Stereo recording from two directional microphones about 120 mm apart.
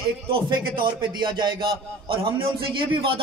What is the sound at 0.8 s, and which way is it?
A man's voice, 40° right (ahead or behind).